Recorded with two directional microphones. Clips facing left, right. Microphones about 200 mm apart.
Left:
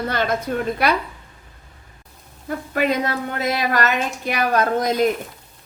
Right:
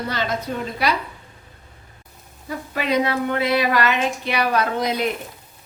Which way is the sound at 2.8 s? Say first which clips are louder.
Even; 50° left (ahead or behind).